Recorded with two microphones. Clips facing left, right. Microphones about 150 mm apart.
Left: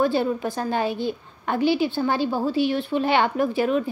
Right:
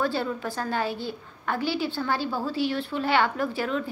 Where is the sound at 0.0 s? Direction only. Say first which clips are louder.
Left 6 dB; 15° left (ahead or behind).